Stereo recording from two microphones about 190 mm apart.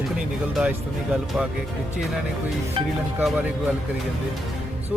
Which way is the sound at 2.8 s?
30° right (ahead or behind).